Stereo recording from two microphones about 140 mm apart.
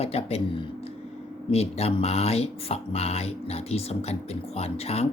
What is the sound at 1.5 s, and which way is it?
Speech, 45° left (ahead or behind).